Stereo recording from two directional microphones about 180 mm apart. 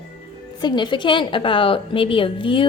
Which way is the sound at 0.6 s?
25° left (ahead or behind).